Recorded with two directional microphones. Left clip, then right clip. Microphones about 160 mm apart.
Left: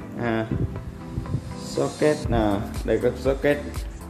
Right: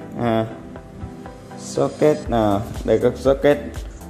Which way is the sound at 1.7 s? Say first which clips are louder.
Right 5 dB; 30° right (ahead or behind).